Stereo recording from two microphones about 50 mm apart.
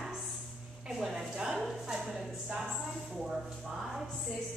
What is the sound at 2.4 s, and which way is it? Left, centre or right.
Speech, centre.